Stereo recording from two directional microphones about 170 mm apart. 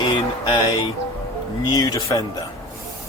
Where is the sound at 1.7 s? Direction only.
20° left (ahead or behind).